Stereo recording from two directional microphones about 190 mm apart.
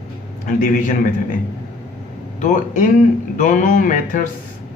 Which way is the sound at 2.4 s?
40° left (ahead or behind).